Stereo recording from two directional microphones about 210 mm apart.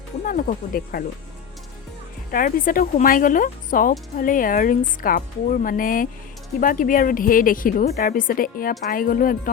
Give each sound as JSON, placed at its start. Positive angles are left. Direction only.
{"t": 0.3, "sound": "speech", "side_deg": 45}
{"t": 2.3, "sound": "a woman's voice", "side_deg": 40}